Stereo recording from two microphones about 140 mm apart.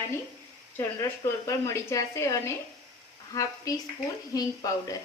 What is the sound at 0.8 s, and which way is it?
Speech, 20° left (ahead or behind).